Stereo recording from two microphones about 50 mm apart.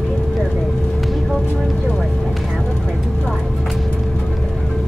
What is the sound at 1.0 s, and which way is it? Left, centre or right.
Music, centre.